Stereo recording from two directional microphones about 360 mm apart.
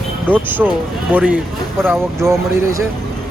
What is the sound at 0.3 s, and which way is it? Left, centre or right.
Speech, centre.